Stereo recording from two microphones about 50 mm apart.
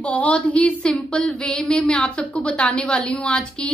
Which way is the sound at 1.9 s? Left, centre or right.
Left.